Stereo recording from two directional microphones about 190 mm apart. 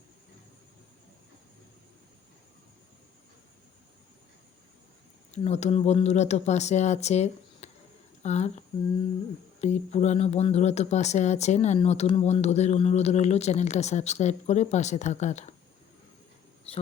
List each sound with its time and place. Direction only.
5.3 s speech: 35° left (ahead or behind)